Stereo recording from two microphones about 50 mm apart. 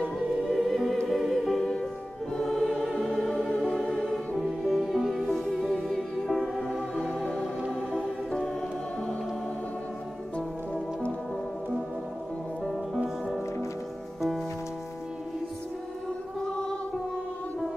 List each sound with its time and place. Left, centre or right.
0.5 s music: centre
2.3 s choir: centre
2.8 s music: centre
4.4 s music: centre
10.3 s music: left
12.6 s music: centre